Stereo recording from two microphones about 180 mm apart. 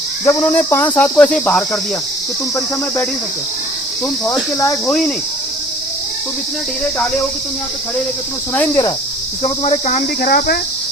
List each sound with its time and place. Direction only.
0.3 s cricket: 10° left (ahead or behind)
4.9 s speech: 5° left (ahead or behind)
8.5 s cricket: 20° left (ahead or behind)
9.4 s speech: 40° left (ahead or behind); by 10.6 s 55° left (ahead or behind)